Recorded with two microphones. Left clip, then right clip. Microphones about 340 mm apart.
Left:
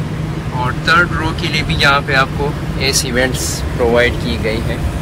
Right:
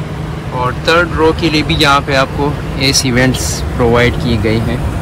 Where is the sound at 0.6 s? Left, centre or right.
Centre.